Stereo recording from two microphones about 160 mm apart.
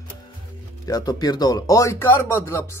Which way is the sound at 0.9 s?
25° left (ahead or behind).